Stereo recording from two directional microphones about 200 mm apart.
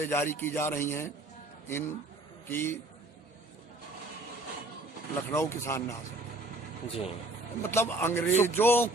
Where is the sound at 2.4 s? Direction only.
10° left (ahead or behind).